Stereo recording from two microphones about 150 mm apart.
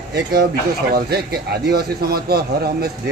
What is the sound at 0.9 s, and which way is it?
Speech, 90° right.